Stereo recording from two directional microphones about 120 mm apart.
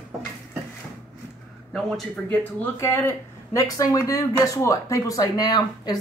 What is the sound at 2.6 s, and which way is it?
Speech, 20° left (ahead or behind).